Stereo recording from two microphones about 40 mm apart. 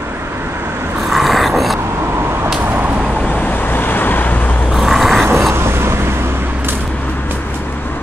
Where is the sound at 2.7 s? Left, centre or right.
Right.